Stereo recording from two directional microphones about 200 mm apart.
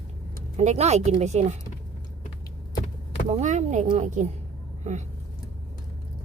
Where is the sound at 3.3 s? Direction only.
35° right (ahead or behind).